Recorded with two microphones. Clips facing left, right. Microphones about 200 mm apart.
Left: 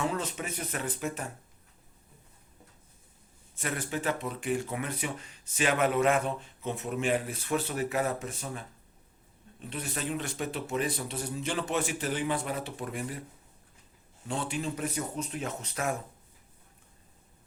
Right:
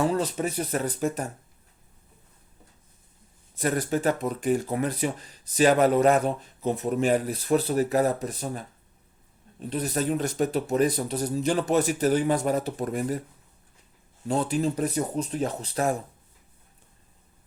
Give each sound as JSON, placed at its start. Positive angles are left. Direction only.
{"t": 0.0, "sound": "speech", "side_deg": -35}
{"t": 3.6, "sound": "speech", "side_deg": -40}
{"t": 14.3, "sound": "speech", "side_deg": -40}